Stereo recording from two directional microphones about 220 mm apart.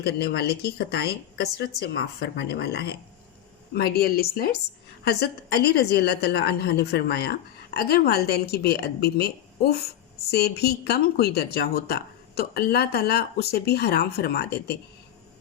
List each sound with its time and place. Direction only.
0.0 s a woman's voice: 45° left (ahead or behind)